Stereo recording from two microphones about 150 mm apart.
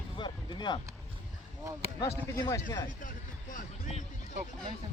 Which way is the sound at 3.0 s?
60° left (ahead or behind).